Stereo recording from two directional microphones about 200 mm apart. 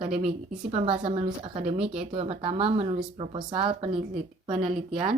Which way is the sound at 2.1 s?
30° right (ahead or behind).